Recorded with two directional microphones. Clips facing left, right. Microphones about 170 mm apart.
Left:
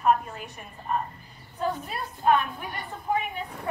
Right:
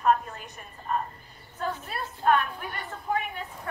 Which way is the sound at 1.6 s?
15° left (ahead or behind).